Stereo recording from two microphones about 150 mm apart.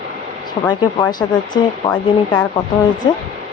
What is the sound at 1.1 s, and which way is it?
Speech, 30° left (ahead or behind).